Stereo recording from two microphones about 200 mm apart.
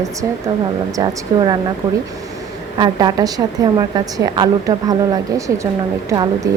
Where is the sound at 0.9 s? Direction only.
20° right (ahead or behind).